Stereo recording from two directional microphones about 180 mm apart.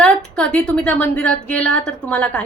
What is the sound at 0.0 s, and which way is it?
A woman's voice, 5° left (ahead or behind).